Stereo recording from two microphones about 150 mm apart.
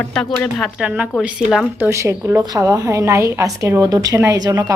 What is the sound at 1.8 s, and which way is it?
Speech, 20° right (ahead or behind).